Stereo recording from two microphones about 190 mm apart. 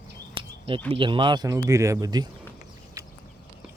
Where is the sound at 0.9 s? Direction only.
25° right (ahead or behind).